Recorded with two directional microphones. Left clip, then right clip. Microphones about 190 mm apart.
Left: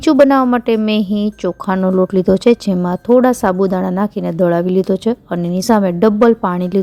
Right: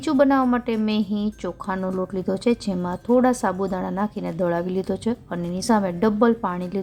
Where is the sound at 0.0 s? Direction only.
40° left (ahead or behind).